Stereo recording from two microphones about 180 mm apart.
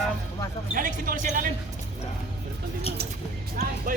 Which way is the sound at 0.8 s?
50° right (ahead or behind).